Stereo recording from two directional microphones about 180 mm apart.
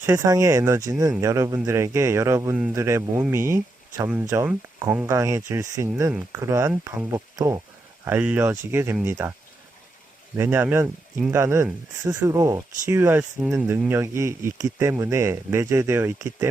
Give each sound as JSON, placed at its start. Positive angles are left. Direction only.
{"t": 0.0, "sound": "speech", "side_deg": -15}
{"t": 10.3, "sound": "speech", "side_deg": -15}